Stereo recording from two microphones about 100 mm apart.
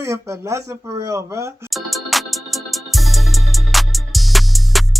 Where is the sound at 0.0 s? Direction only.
30° right (ahead or behind).